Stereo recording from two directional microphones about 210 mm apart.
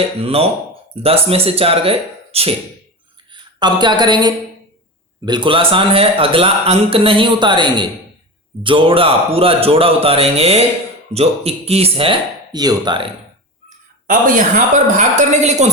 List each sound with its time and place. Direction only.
0.2 s a woman's voice: 30° right (ahead or behind)
13.7 s a woman's voice: 40° right (ahead or behind)